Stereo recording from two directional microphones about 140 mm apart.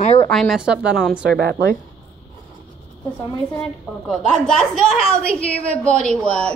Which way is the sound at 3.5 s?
5° left (ahead or behind).